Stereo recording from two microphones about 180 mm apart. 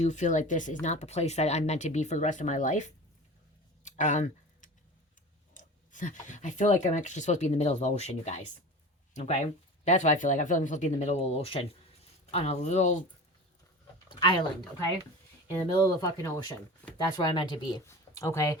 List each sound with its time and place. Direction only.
0.0 s speech: 40° left (ahead or behind)
3.8 s a sound: 45° left (ahead or behind)
5.5 s speech: 45° left (ahead or behind)
14.1 s speech: 25° left (ahead or behind)
15.4 s speech: 15° left (ahead or behind)